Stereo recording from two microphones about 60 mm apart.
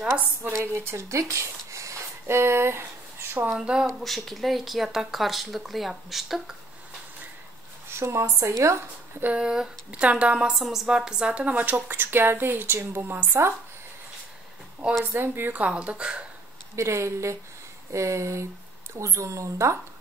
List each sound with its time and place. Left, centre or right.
0.1 s a woman's voice: right
0.6 s speech: right
3.5 s a woman's voice: centre
4.0 s speech: centre
8.0 s a woman's voice: right
9.2 s speech: centre
10.5 s a woman's voice: centre; by 11.7 s right
11.9 s a woman's voice: right
15.0 s speech: right; by 16.3 s centre
16.7 s a woman's voice: right